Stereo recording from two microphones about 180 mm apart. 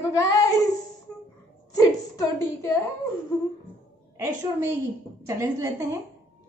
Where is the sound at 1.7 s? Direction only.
20° left (ahead or behind).